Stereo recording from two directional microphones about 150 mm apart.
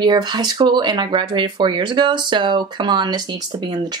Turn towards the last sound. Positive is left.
turn(degrees=-30)  # may be behind; listen again after turning